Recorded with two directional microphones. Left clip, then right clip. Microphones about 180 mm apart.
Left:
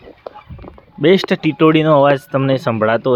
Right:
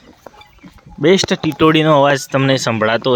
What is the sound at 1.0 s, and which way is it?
Speech, centre (ahead or behind).